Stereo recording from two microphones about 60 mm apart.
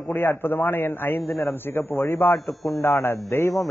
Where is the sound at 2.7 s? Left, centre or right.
Left.